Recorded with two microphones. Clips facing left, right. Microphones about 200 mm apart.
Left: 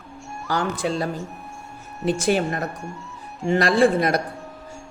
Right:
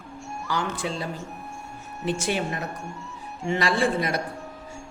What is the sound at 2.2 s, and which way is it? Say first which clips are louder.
Speech: left 8 dB; 40° left (ahead or behind).